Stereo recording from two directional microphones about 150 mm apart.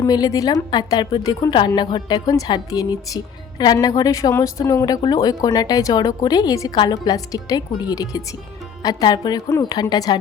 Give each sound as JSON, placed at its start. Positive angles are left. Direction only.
{"t": 0.0, "sound": "a woman's voice", "side_deg": 25}